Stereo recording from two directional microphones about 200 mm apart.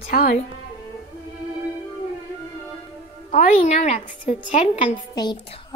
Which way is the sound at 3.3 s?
35° left (ahead or behind).